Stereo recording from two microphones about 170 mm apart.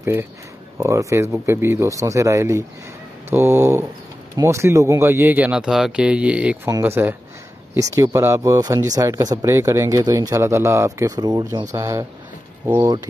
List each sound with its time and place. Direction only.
0.0 s a man's voice: 15° right (ahead or behind)